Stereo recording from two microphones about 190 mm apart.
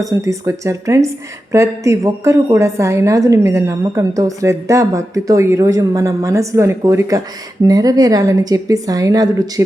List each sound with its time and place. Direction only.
0.0 s a woman's voice: 15° right (ahead or behind)